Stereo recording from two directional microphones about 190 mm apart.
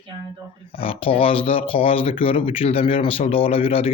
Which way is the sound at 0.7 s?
30° left (ahead or behind).